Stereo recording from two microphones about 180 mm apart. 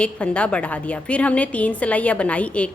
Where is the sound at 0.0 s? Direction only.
5° left (ahead or behind).